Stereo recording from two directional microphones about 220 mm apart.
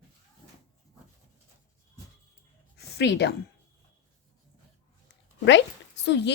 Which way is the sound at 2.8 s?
50° left (ahead or behind).